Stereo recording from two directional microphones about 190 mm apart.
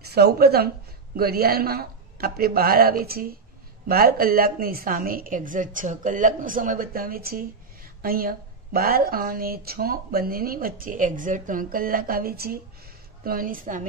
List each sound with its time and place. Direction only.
0.1 s a woman's voice: 55° right (ahead or behind)